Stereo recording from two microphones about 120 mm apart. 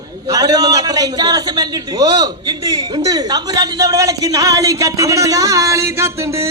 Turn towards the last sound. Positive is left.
turn(degrees=-25)  # may be behind; listen again after turning